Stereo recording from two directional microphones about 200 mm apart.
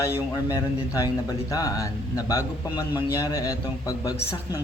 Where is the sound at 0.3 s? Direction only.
15° left (ahead or behind).